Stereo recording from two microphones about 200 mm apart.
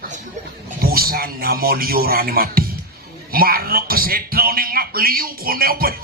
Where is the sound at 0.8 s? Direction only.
50° right (ahead or behind).